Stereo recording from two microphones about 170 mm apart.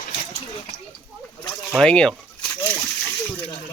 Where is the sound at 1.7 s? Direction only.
5° left (ahead or behind).